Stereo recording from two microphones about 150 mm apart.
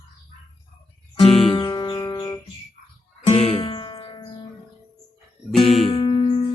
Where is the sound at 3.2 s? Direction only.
45° left (ahead or behind).